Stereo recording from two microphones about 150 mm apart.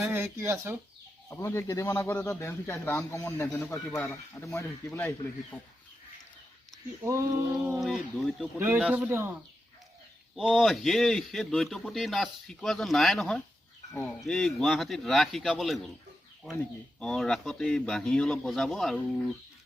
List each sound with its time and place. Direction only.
0.0 s speech: 15° right (ahead or behind)
1.3 s a man's voice: 20° left (ahead or behind)
7.8 s speech: centre (ahead or behind)
8.5 s speech: 15° right (ahead or behind)
10.3 s speech: centre (ahead or behind)
17.0 s speech: 5° left (ahead or behind)